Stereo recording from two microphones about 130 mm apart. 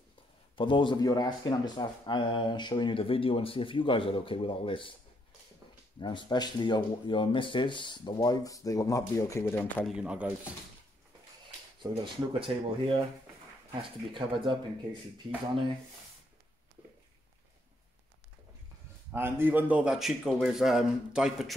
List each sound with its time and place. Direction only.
0.6 s speech: 40° left (ahead or behind)
5.9 s speech: 35° left (ahead or behind); by 9.8 s 20° left (ahead or behind)
9.8 s speech: 5° right (ahead or behind)
11.8 s speech: 40° right (ahead or behind)
14.1 s speech: 40° right (ahead or behind)
19.1 s a man's voice: 15° right (ahead or behind)